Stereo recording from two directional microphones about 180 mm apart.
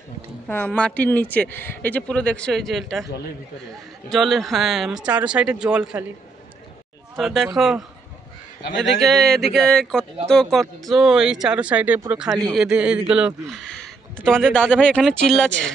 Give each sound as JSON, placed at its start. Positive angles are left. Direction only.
{"t": 0.5, "sound": "speech", "side_deg": 10}
{"t": 3.1, "sound": "speech", "side_deg": 65}
{"t": 3.7, "sound": "speech", "side_deg": 0}
{"t": 7.2, "sound": "speech", "side_deg": 0}